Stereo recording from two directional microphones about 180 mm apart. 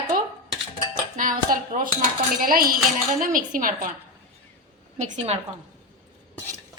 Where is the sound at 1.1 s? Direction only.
45° right (ahead or behind).